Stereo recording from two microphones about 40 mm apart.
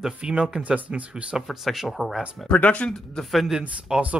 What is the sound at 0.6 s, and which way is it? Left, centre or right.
Speech, right.